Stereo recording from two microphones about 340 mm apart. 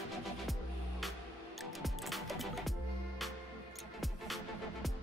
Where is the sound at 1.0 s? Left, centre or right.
Centre.